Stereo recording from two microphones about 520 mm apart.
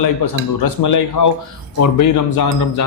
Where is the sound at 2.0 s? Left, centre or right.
Left.